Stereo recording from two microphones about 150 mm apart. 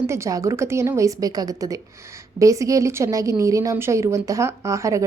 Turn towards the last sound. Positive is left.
turn(degrees=-20)  # may be behind; listen again after turning